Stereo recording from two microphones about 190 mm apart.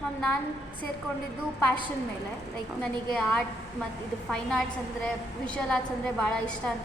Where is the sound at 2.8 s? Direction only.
5° left (ahead or behind).